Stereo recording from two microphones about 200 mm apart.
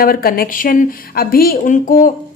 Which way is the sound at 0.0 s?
45° left (ahead or behind).